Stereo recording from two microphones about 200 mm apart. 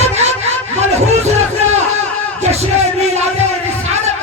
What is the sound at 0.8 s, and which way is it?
Music, 30° right (ahead or behind).